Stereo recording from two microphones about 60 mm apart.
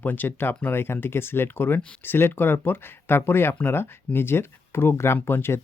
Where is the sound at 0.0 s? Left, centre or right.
Left.